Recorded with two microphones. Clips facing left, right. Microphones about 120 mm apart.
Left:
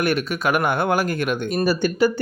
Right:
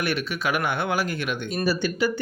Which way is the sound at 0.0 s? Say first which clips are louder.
Left 5 dB; 45° left (ahead or behind).